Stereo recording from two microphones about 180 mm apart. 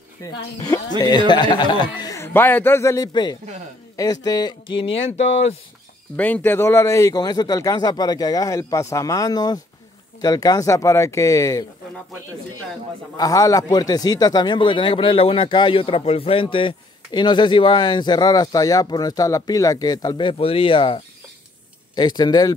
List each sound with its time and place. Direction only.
0.2 s speech: 20° left (ahead or behind); by 5.6 s 35° left (ahead or behind)
6.1 s speech: 10° left (ahead or behind)
13.2 s speech: 20° left (ahead or behind)